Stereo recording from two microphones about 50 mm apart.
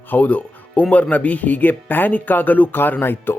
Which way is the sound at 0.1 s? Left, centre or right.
Left.